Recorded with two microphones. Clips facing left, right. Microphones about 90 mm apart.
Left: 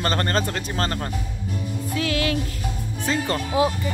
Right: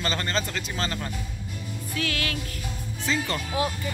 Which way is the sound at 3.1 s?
40° left (ahead or behind).